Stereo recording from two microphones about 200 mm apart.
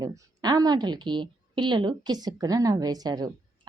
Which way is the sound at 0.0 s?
20° right (ahead or behind).